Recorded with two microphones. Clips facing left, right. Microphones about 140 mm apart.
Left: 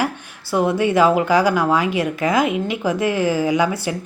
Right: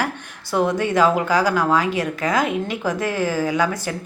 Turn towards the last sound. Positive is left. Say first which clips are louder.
# left 2 dB
turn(degrees=10)  # may be behind; listen again after turning